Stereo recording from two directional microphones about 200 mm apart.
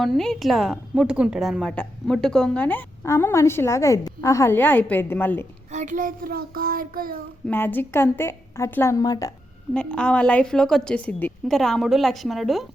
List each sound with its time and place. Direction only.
0.0 s a woman's voice: centre (ahead or behind)
5.7 s child singing: 40° right (ahead or behind)
7.4 s a woman's voice: 10° left (ahead or behind)
9.7 s a woman's voice: 5° left (ahead or behind)